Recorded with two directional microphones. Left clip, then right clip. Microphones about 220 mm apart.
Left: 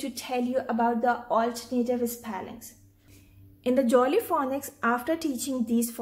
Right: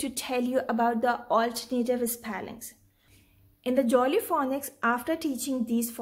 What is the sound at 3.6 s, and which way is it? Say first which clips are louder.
A woman's voice: left 2 dB; 10° right (ahead or behind).